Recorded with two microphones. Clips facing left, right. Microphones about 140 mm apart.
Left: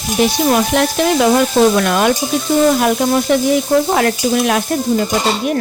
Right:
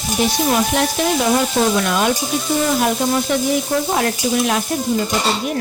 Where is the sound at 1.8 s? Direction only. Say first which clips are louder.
Left 4 dB; 65° left (ahead or behind).